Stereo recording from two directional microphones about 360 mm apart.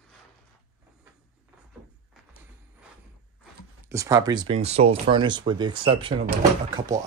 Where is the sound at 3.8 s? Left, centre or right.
Centre.